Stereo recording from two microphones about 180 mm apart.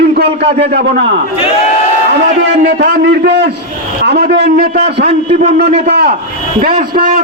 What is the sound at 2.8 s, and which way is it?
Speech, 65° right (ahead or behind).